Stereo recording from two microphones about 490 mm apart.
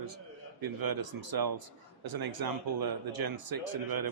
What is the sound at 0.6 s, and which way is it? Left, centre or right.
Speech, right.